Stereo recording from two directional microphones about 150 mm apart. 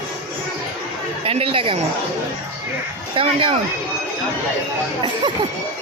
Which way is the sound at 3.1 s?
35° right (ahead or behind).